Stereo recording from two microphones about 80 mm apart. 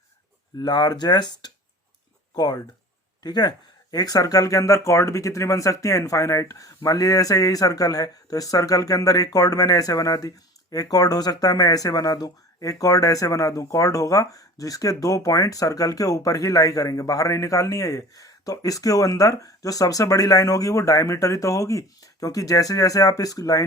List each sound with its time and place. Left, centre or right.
0.6 s speech: left